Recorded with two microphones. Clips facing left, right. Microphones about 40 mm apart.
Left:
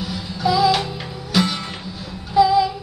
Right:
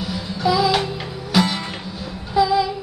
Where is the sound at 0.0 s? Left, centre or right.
Centre.